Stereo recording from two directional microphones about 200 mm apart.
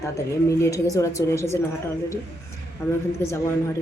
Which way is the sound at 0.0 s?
15° left (ahead or behind).